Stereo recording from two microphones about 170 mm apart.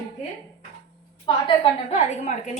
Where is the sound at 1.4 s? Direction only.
35° left (ahead or behind).